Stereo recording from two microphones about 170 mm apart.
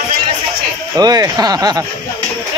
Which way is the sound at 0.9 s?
20° right (ahead or behind).